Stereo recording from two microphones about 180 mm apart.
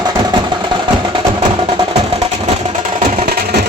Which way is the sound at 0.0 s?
20° right (ahead or behind).